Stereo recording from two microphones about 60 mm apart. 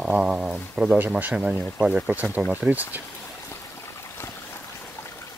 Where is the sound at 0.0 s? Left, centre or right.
Centre.